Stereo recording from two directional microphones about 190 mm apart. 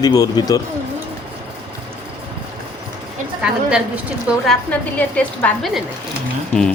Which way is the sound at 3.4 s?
5° right (ahead or behind).